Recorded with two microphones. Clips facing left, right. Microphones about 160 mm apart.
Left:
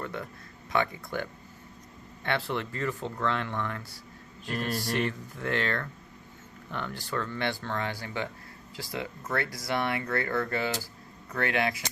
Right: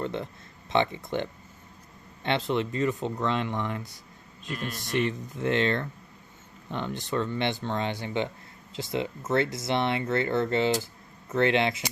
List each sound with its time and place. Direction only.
0.0 s a sound: 25° right (ahead or behind)
0.7 s speech: 25° right (ahead or behind)
4.5 s speech: 45° left (ahead or behind)
4.8 s speech: 20° right (ahead or behind)